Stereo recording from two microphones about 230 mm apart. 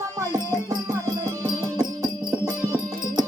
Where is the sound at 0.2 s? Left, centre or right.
Centre.